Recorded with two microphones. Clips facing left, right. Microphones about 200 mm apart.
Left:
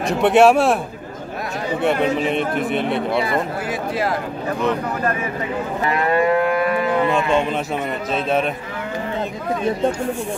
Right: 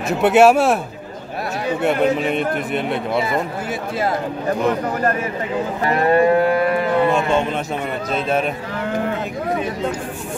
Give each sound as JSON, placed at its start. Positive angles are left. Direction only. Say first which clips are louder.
{"t": 0.2, "sound": "a man's voice", "louder": "right 1 dB", "side_deg": -5}
{"t": 1.8, "sound": "a man's voice", "louder": "right 1 dB", "side_deg": 0}
{"t": 5.9, "sound": "cattle", "louder": "right 3 dB", "side_deg": -35}
{"t": 8.1, "sound": "a man's voice", "louder": "even", "side_deg": 0}